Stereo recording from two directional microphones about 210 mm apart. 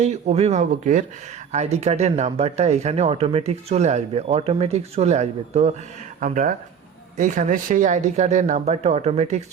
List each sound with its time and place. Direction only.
0.0 s speech: 30° right (ahead or behind)